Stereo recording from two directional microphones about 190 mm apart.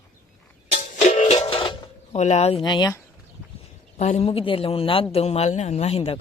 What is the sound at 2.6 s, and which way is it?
Speech, 20° left (ahead or behind).